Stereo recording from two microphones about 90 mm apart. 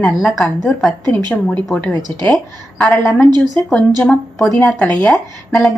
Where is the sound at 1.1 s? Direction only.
15° left (ahead or behind).